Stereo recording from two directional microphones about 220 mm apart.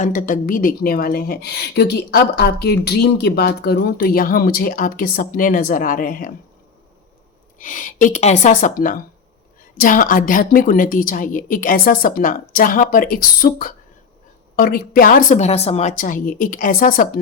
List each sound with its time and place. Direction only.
0.0 s a woman's voice: 35° left (ahead or behind)
7.6 s a woman's voice: 35° left (ahead or behind)